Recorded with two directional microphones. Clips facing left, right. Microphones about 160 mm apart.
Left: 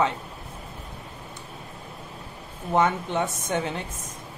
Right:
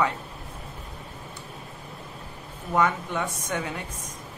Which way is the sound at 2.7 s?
25° left (ahead or behind).